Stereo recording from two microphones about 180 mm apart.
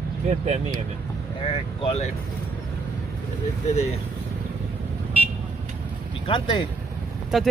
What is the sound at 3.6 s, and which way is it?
Speech, 35° left (ahead or behind).